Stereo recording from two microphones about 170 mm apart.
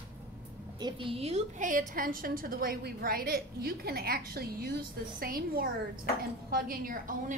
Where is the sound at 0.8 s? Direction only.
30° right (ahead or behind); by 7.4 s 55° right (ahead or behind).